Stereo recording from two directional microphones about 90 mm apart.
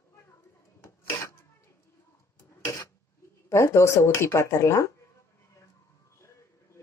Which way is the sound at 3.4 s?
30° left (ahead or behind).